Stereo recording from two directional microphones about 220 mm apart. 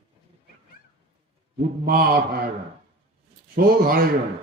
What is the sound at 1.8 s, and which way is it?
Speech, 40° right (ahead or behind).